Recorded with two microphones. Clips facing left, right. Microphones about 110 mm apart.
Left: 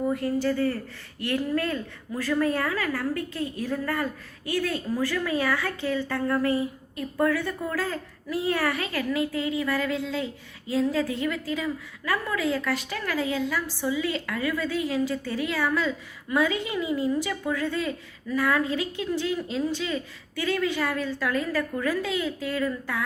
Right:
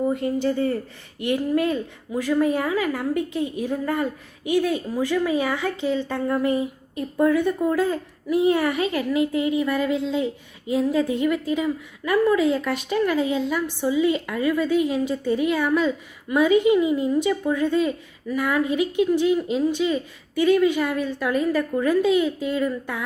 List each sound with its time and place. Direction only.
0.0 s a woman's voice: 20° right (ahead or behind)